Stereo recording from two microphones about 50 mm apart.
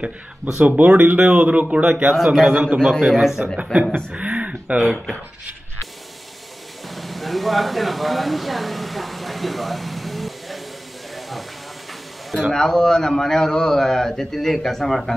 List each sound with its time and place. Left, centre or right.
0.0 s speech: right
2.9 s a man's voice: centre
4.1 s a sound: right
7.0 s speech: centre
11.1 s hiss: centre
12.3 s speech: centre
12.5 s a man's voice: centre